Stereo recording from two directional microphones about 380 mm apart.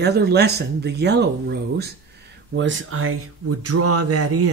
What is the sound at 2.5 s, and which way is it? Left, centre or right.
Speech, right.